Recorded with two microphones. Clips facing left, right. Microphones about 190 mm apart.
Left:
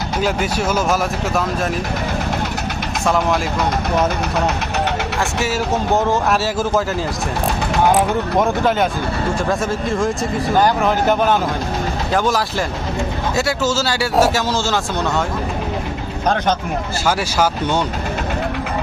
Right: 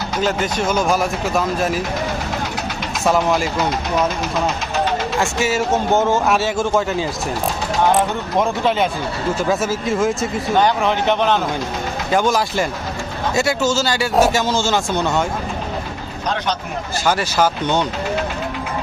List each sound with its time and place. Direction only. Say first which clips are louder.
0.2 s speech: even; 10° left (ahead or behind)
3.1 s speech: right 1 dB; centre (ahead or behind)
5.2 s speech: right 1 dB; centre (ahead or behind)
16.2 s speech: left 4 dB; 50° left (ahead or behind)
17.1 s speech: right 1 dB; 10° left (ahead or behind)